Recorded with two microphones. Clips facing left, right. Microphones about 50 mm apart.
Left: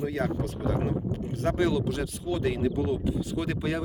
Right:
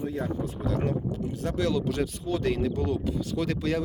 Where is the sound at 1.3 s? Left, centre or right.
Left.